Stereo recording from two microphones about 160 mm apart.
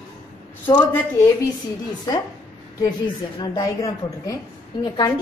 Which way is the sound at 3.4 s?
25° left (ahead or behind).